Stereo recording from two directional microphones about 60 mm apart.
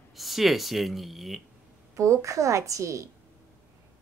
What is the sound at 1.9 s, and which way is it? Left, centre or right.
A woman's voice, right.